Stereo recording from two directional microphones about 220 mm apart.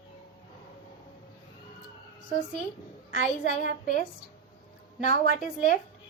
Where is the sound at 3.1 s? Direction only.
40° left (ahead or behind).